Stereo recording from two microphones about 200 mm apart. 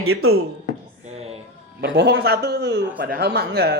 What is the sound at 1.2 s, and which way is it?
Female singing, 30° right (ahead or behind).